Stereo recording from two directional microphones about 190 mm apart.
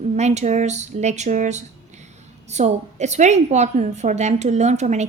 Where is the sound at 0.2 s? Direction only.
35° right (ahead or behind).